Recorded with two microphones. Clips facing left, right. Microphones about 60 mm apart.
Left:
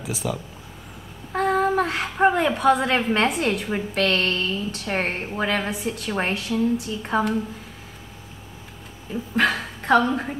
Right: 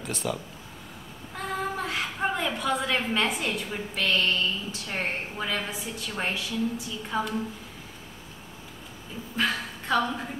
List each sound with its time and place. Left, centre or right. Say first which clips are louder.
0.0 s speech: left 3 dB; centre
1.3 s a woman's voice: left 11 dB; left
9.4 s a woman's voice: left 6 dB; left